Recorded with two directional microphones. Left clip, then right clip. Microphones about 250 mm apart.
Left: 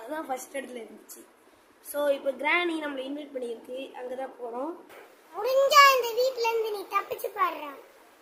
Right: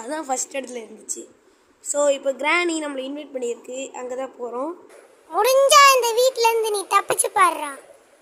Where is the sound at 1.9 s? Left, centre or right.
Centre.